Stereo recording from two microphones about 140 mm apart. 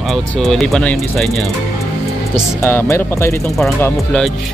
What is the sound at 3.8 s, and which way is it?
Speech, 5° left (ahead or behind).